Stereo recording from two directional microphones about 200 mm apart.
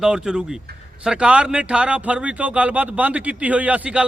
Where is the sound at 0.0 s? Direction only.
5° right (ahead or behind).